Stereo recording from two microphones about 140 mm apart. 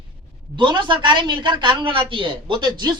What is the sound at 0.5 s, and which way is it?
A woman's voice, 35° right (ahead or behind).